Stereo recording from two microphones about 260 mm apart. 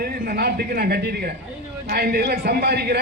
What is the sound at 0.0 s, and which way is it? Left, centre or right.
A man's voice, right.